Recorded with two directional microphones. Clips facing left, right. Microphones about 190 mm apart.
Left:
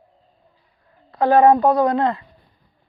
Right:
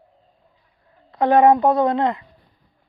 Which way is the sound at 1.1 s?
20° right (ahead or behind).